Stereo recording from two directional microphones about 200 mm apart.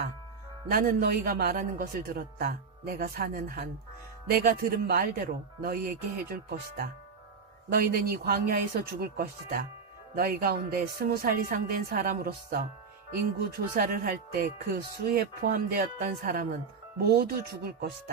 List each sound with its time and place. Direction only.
0.7 s speech: 45° right (ahead or behind)